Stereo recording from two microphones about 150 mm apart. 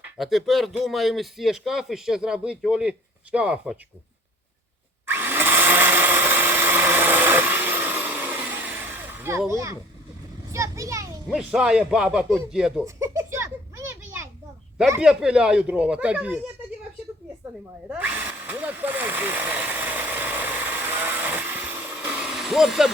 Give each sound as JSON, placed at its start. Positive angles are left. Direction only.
{"t": 0.2, "sound": "a man's voice", "side_deg": 0}
{"t": 5.0, "sound": "drill", "side_deg": -15}
{"t": 9.5, "sound": "speech", "side_deg": -20}
{"t": 10.5, "sound": "a sound", "side_deg": -20}
{"t": 11.3, "sound": "a man's voice", "side_deg": -5}
{"t": 12.8, "sound": "children playing", "side_deg": -20}
{"t": 15.0, "sound": "a man's voice", "side_deg": -5}
{"t": 17.8, "sound": "a sound", "side_deg": -10}